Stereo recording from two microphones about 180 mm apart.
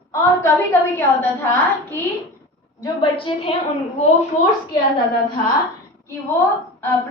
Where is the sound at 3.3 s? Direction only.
30° left (ahead or behind).